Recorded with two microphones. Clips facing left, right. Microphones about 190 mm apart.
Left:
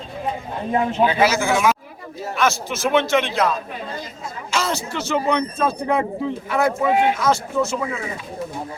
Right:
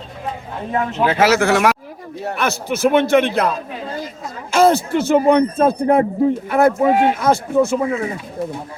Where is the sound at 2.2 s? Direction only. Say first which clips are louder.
Even; 60° right (ahead or behind).